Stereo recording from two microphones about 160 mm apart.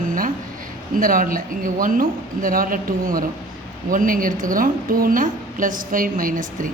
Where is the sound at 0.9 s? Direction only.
60° right (ahead or behind).